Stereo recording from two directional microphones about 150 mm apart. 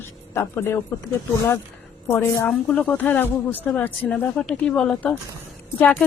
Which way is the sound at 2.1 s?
15° left (ahead or behind).